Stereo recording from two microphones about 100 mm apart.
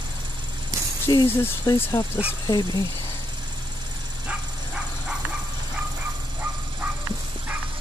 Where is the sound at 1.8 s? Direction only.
30° left (ahead or behind).